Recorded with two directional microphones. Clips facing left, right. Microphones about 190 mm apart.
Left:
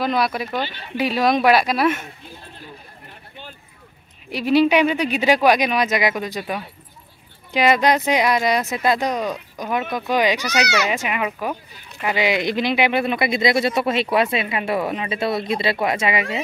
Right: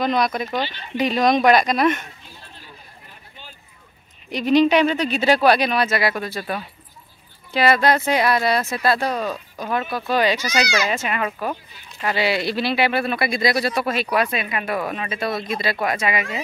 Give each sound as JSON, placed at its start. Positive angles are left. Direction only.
{"t": 0.0, "sound": "speech", "side_deg": 5}
{"t": 4.3, "sound": "speech", "side_deg": 5}
{"t": 10.4, "sound": "speech", "side_deg": 65}
{"t": 10.9, "sound": "speech", "side_deg": 15}